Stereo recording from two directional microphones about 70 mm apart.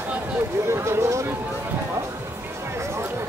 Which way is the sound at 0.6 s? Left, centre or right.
Right.